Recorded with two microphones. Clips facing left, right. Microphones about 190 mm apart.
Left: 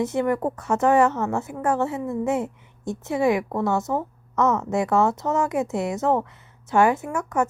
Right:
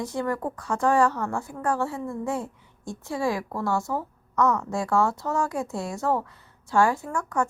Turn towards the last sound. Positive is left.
turn(degrees=20)  # may be behind; listen again after turning